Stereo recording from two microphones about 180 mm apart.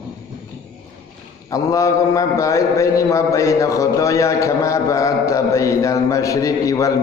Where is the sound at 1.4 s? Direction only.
20° left (ahead or behind).